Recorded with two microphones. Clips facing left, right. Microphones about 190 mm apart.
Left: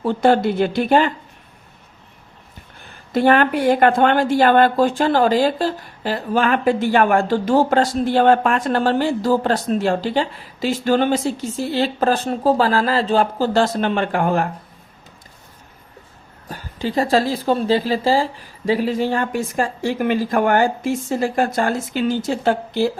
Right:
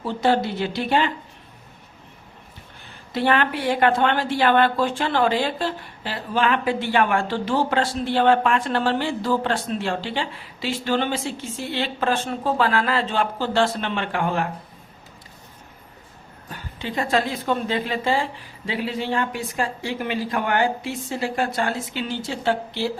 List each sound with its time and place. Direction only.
0.0 s a woman's voice: 50° left (ahead or behind)
3.1 s a woman's voice: 45° left (ahead or behind)
16.5 s a woman's voice: 35° left (ahead or behind)